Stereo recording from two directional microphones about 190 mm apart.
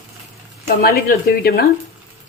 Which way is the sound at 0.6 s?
55° left (ahead or behind).